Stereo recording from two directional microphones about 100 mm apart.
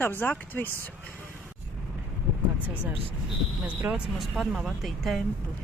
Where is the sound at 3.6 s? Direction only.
15° right (ahead or behind).